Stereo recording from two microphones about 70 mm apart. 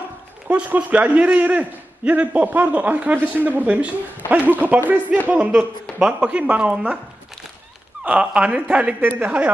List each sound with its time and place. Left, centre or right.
0.5 s a man's voice: centre
5.6 s speech: centre
8.0 s a man's voice: centre